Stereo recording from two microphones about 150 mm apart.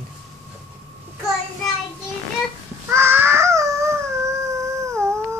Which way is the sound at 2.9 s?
15° right (ahead or behind).